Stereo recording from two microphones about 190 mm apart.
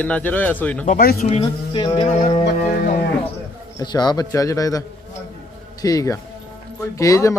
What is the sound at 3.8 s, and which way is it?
A man's voice, 20° left (ahead or behind).